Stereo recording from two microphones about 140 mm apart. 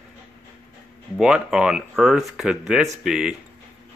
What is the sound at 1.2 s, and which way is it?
Speech, 5° right (ahead or behind).